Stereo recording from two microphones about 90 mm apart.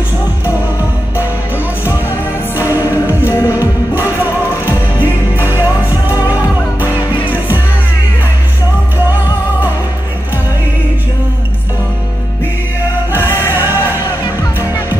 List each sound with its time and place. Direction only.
2.5 s music: 20° right (ahead or behind)
3.3 s music: 35° left (ahead or behind)
5.0 s music: 20° right (ahead or behind)
7.2 s music: 20° right (ahead or behind)
13.2 s music: 30° left (ahead or behind)
13.5 s music: 25° right (ahead or behind)